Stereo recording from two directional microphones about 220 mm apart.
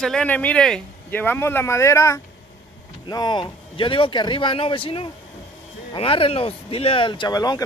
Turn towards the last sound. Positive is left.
turn(degrees=20)  # may be behind; listen again after turning